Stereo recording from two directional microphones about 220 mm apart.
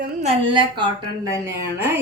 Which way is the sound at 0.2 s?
25° right (ahead or behind).